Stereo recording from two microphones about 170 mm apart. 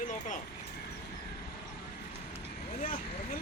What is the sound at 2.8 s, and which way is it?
Vehicle, 55° left (ahead or behind).